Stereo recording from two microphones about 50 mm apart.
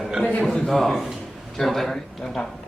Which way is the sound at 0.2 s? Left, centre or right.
Left.